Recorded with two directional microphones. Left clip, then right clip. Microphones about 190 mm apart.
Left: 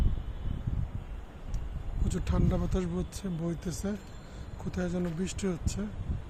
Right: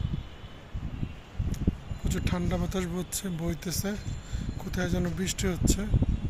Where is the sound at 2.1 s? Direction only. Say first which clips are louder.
Right 2 dB; 10° left (ahead or behind).